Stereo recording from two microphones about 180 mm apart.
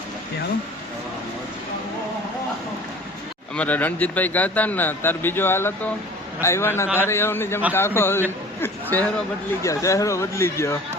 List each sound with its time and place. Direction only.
3.5 s speech: 10° left (ahead or behind)